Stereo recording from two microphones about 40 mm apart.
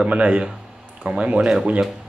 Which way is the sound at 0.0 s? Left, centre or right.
Right.